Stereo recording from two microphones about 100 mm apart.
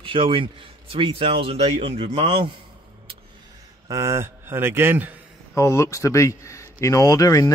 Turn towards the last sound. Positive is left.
turn(degrees=35)  # may be behind; listen again after turning